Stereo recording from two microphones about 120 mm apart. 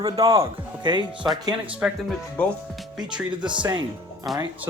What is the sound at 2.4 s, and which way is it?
Speech, 10° left (ahead or behind).